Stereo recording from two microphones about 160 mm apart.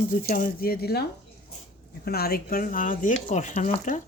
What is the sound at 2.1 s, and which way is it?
Speech, 75° left (ahead or behind).